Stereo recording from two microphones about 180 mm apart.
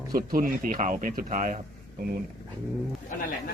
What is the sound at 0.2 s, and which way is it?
Speech, 50° right (ahead or behind).